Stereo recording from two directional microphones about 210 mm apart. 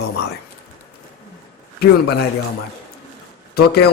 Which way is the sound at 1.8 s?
50° left (ahead or behind).